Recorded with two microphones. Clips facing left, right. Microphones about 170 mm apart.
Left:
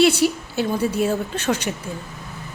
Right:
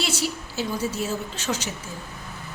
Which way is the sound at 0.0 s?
60° left (ahead or behind).